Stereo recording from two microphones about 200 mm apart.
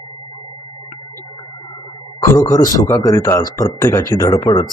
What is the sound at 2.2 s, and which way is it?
Speech, 15° left (ahead or behind).